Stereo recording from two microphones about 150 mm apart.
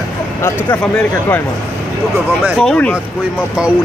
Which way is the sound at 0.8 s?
10° left (ahead or behind).